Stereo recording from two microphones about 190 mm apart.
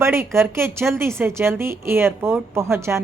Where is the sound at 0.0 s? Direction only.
15° right (ahead or behind).